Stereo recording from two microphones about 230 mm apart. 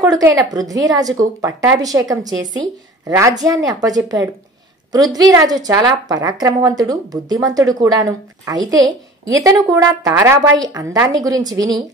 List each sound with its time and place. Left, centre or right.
0.0 s a woman's voice: centre